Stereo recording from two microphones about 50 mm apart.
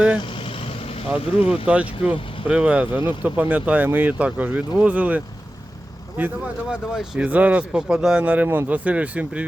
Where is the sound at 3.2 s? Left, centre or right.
Right.